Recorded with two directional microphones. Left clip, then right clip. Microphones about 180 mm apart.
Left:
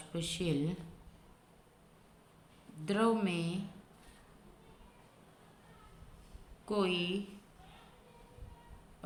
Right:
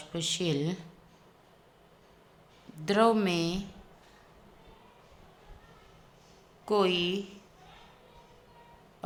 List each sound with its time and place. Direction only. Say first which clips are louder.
0.1 s speech: right 6 dB; 25° right (ahead or behind)
2.8 s speech: right 7 dB; 35° right (ahead or behind)
6.7 s speech: right 7 dB; 35° right (ahead or behind)